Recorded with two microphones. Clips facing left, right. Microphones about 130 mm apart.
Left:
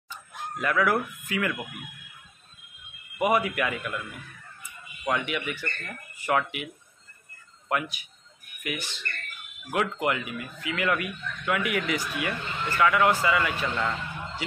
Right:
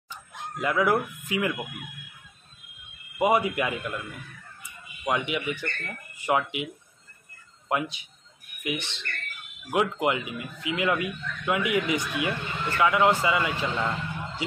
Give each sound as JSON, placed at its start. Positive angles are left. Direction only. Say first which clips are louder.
{"t": 0.1, "sound": "speech", "louder": "left 1 dB", "side_deg": -20}
{"t": 3.2, "sound": "speech", "louder": "right 1 dB", "side_deg": -25}
{"t": 5.0, "sound": "speech", "louder": "right 1 dB", "side_deg": -20}